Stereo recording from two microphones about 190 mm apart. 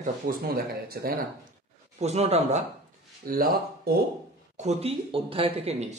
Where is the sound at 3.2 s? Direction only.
50° right (ahead or behind).